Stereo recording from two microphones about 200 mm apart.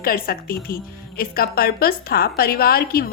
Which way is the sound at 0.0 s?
50° left (ahead or behind).